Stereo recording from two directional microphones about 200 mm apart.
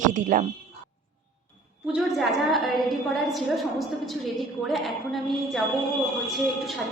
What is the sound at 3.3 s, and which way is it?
A woman's voice, centre (ahead or behind).